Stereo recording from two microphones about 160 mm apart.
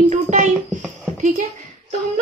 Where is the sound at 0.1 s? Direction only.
50° right (ahead or behind).